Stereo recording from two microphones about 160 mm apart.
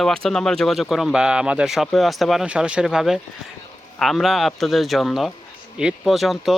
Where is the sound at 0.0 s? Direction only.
5° left (ahead or behind).